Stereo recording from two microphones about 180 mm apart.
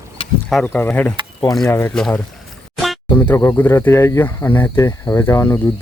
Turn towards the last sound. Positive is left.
turn(degrees=15)  # may be behind; listen again after turning